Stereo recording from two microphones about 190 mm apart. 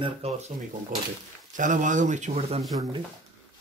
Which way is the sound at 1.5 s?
40° right (ahead or behind).